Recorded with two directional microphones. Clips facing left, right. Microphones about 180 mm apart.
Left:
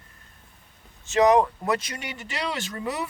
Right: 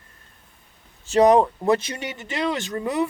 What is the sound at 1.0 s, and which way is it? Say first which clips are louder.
Speech: right 3 dB; 35° right (ahead or behind).